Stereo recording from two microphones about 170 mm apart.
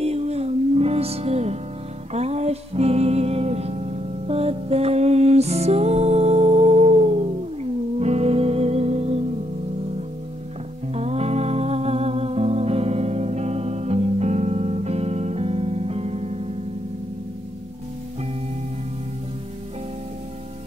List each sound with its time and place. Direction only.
0.0 s music: 40° right (ahead or behind)
10.9 s music: 40° right (ahead or behind)